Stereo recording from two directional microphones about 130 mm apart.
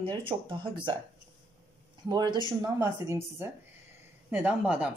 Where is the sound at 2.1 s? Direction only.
35° right (ahead or behind).